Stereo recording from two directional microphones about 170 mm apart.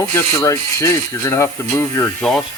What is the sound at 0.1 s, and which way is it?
Speech, 15° left (ahead or behind).